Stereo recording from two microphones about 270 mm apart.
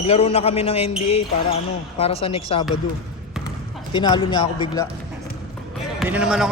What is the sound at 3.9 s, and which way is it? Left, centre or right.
Speech, centre.